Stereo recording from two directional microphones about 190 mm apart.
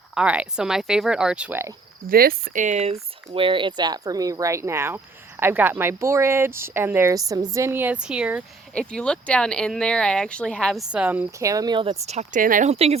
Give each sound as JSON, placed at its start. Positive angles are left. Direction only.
{"t": 0.1, "sound": "speech", "side_deg": -5}
{"t": 2.0, "sound": "speech", "side_deg": -50}
{"t": 8.7, "sound": "speech", "side_deg": 5}
{"t": 12.7, "sound": "speech", "side_deg": -30}